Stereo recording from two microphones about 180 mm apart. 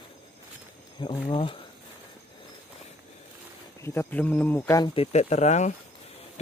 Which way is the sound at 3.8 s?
10° left (ahead or behind).